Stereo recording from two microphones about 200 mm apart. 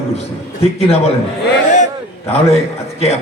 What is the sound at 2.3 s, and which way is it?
Speech, 30° left (ahead or behind).